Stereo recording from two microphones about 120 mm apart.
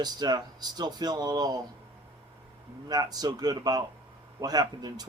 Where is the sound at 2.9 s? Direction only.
30° right (ahead or behind).